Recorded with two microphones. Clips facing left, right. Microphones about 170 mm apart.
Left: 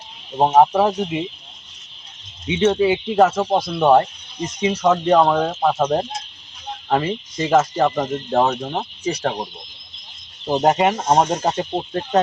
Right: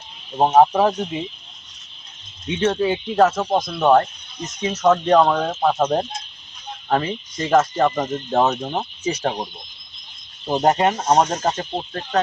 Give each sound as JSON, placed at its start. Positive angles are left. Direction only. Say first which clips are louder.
{"t": 0.3, "sound": "speech", "louder": "even", "side_deg": 0}
{"t": 2.5, "sound": "speech", "louder": "left 3 dB", "side_deg": 5}
{"t": 7.1, "sound": "speech", "louder": "left 1 dB", "side_deg": 5}
{"t": 10.4, "sound": "speech", "louder": "left 1 dB", "side_deg": 0}